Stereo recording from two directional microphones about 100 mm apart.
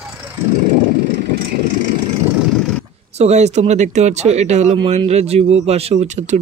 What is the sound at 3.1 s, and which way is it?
Speech, 90° right.